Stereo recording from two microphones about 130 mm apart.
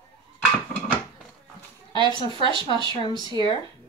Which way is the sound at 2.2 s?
40° right (ahead or behind).